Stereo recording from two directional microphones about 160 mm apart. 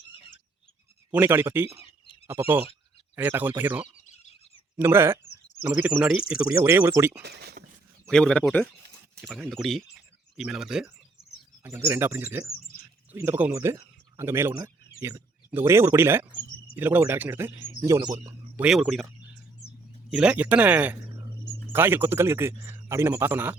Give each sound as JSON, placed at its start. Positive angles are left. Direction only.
{"t": 1.1, "sound": "speech", "side_deg": -10}
{"t": 4.0, "sound": "bird", "side_deg": 45}
{"t": 4.8, "sound": "speech", "side_deg": -15}
{"t": 7.2, "sound": "speech", "side_deg": -90}
{"t": 8.0, "sound": "speech", "side_deg": 5}
{"t": 11.6, "sound": "speech", "side_deg": -15}
{"t": 18.6, "sound": "speech", "side_deg": -5}